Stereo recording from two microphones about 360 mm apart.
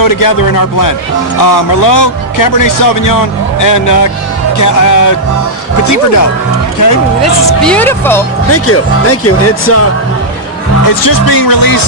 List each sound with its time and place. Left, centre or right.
0.0 s speech: left
6.8 s speech: left
7.6 s speech: centre
8.4 s speech: left
11.0 s speech: left